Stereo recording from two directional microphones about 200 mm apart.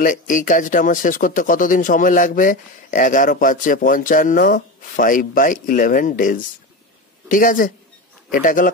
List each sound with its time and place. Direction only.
0.0 s a man's voice: 40° left (ahead or behind)